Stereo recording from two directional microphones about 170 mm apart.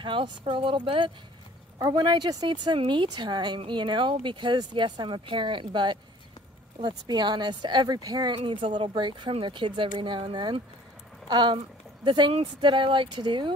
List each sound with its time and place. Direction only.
0.0 s speech: 30° right (ahead or behind)